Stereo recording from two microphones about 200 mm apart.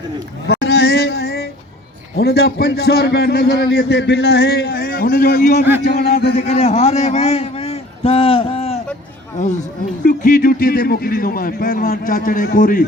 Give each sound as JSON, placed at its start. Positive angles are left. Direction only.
{"t": 0.4, "sound": "a sound", "side_deg": 55}
{"t": 2.1, "sound": "a man's voice", "side_deg": 50}
{"t": 6.4, "sound": "a man's voice", "side_deg": 35}